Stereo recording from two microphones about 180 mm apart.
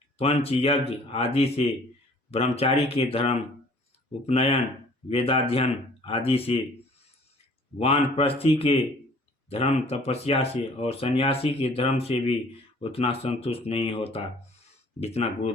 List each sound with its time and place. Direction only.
0.2 s speech: 35° left (ahead or behind)
7.8 s speech: 35° left (ahead or behind)